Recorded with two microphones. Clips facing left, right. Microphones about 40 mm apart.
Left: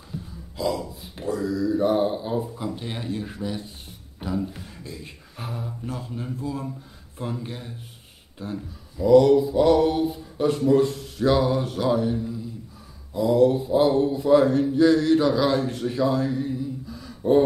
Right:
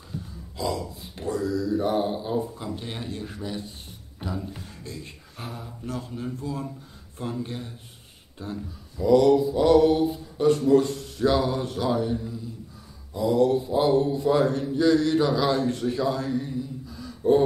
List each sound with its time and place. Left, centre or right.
0.6 s speech: centre
10.6 s speech: centre
10.9 s speech: centre
15.5 s speech: centre